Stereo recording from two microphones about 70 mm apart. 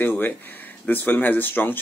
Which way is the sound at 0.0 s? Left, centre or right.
Left.